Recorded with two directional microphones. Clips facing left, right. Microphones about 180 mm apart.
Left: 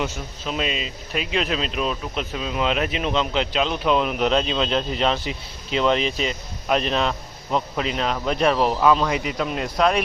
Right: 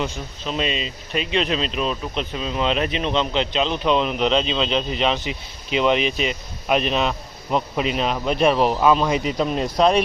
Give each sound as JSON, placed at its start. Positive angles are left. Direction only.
{"t": 0.0, "sound": "speech", "side_deg": 5}
{"t": 4.4, "sound": "a man's voice", "side_deg": -5}